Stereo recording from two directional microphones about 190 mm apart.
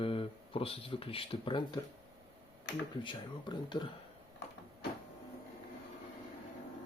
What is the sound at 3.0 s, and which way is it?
Speech, 25° left (ahead or behind).